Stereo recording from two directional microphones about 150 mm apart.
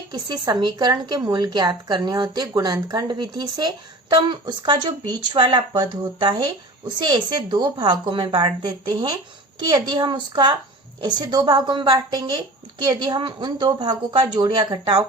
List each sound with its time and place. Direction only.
0.1 s a woman's voice: 25° right (ahead or behind)